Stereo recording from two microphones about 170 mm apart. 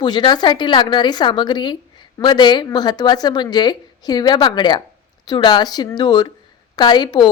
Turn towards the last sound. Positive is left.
turn(degrees=25)  # may be behind; listen again after turning